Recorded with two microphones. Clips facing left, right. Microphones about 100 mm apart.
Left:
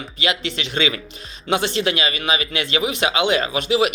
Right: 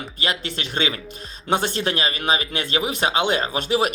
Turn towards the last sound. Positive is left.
turn(degrees=-45)  # may be behind; listen again after turning